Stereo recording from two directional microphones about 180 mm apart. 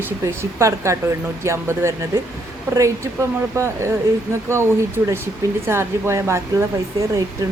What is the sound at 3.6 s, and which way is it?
Speech, 15° right (ahead or behind).